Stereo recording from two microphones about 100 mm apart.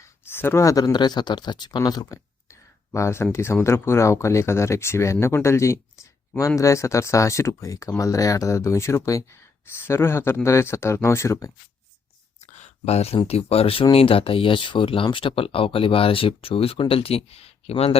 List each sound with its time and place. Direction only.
0.3 s speech: 25° left (ahead or behind)
0.9 s speech: 45° left (ahead or behind)
2.5 s a sound: 30° left (ahead or behind)
3.3 s speech: 25° left (ahead or behind)
12.8 s speech: 90° left